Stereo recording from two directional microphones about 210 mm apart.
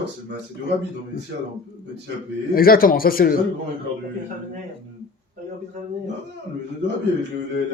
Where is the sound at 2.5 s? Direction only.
45° left (ahead or behind).